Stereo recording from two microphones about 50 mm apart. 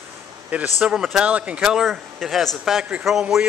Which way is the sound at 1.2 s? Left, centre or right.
Right.